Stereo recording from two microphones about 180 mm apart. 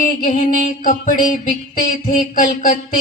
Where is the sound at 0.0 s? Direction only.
50° left (ahead or behind).